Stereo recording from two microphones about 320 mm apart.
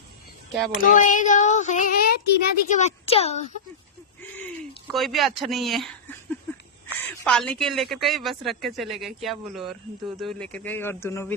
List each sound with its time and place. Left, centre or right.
0.8 s speech: left
4.9 s speech: centre
7.3 s speech: centre